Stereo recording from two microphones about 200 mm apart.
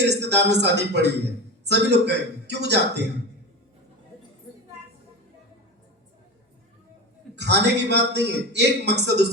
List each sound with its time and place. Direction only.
0.0 s a man's voice: 60° right (ahead or behind)
7.3 s a man's voice: 60° right (ahead or behind)